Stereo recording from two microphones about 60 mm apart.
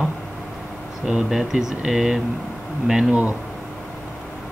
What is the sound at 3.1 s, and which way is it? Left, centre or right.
Speech, right.